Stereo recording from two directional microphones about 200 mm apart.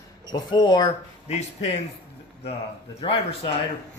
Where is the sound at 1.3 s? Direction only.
30° left (ahead or behind).